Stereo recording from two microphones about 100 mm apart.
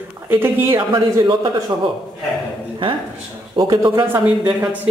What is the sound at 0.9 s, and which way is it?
Speech, 55° right (ahead or behind).